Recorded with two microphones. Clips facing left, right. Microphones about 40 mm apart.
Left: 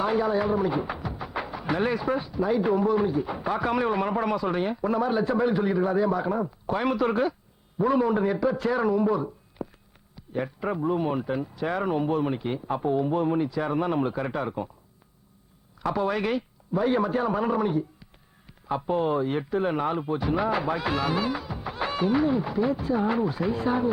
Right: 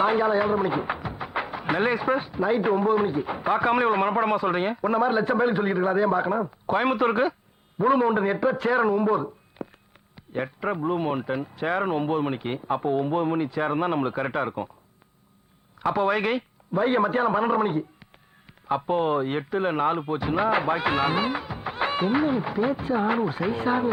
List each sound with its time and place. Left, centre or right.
0.0 s speech: right
15.9 s speech: right